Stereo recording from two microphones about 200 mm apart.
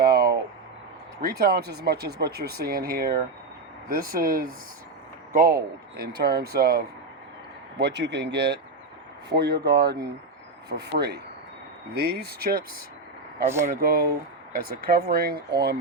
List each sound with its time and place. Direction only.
0.0 s a sound: 50° right (ahead or behind)
1.2 s speech: 50° right (ahead or behind)
13.7 s speech: 50° right (ahead or behind)